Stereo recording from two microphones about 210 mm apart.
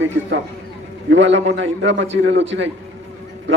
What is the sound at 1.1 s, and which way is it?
A man's voice, 60° right (ahead or behind).